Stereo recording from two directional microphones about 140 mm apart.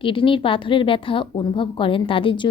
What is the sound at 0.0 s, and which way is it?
A woman's voice, 40° left (ahead or behind).